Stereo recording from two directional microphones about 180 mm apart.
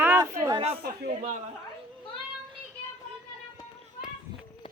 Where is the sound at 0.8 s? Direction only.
55° right (ahead or behind).